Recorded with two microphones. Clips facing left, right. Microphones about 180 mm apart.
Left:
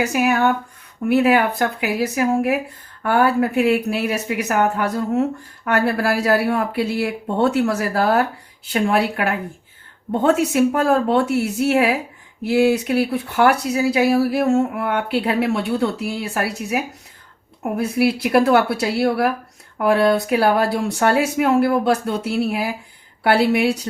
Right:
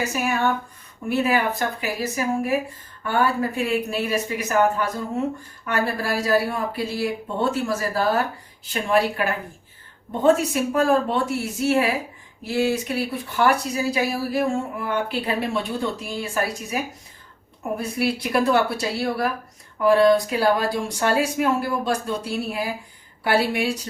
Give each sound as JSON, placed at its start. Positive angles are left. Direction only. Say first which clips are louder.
{"t": 0.0, "sound": "speech", "louder": "left 5 dB", "side_deg": 65}
{"t": 17.6, "sound": "speech", "louder": "left 6 dB", "side_deg": 65}